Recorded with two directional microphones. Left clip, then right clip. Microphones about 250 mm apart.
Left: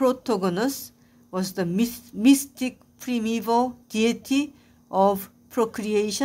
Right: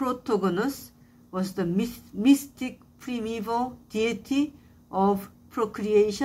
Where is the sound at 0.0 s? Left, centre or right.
Left.